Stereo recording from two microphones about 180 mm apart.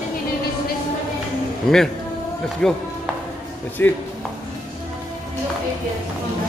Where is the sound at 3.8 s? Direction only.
10° left (ahead or behind).